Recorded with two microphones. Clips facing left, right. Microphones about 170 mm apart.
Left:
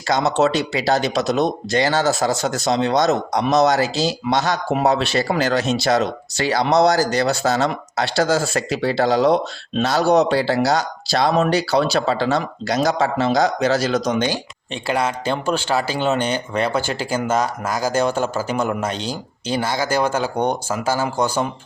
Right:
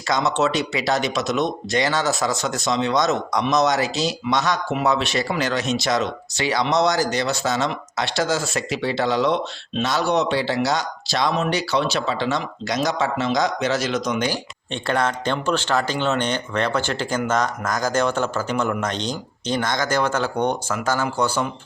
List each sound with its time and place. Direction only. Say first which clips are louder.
0.1 s speech: left 3 dB; 35° left (ahead or behind)
14.7 s speech: left 1 dB; 5° left (ahead or behind)